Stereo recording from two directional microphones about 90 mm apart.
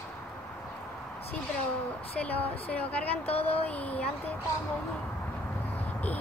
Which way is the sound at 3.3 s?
90° left.